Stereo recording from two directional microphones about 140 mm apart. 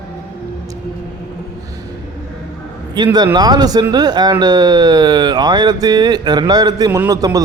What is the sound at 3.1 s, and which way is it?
Speech, 30° right (ahead or behind).